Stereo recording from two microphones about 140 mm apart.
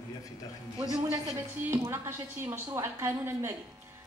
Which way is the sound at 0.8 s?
5° right (ahead or behind).